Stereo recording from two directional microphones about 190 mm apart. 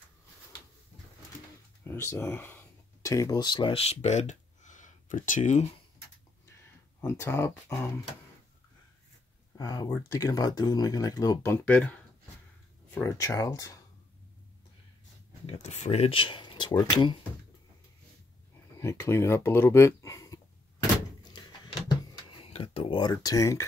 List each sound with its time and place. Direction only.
1.9 s speech: 15° left (ahead or behind); by 5.7 s 40° left (ahead or behind)
7.0 s speech: 15° left (ahead or behind)
9.6 s speech: 20° left (ahead or behind)
12.9 s speech: 15° left (ahead or behind)
15.4 s speech: 35° left (ahead or behind)
18.8 s speech: 15° left (ahead or behind)
20.8 s door: 20° left (ahead or behind)
22.3 s a sound: 30° left (ahead or behind)
23.1 s speech: 20° left (ahead or behind)